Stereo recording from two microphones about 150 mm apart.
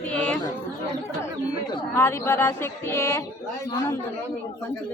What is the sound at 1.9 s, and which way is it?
Speech, 15° left (ahead or behind).